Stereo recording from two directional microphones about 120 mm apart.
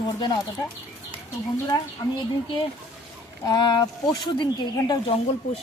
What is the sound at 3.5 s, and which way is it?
Speech, 35° left (ahead or behind).